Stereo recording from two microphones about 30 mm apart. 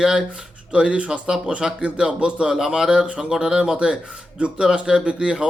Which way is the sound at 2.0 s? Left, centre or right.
Right.